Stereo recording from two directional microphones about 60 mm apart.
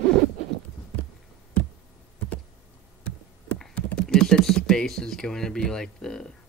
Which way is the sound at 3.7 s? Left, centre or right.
Centre.